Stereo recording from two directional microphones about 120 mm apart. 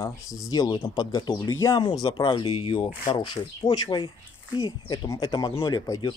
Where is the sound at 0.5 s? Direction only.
30° left (ahead or behind).